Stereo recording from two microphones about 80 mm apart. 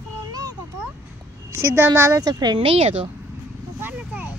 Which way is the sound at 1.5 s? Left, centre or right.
Right.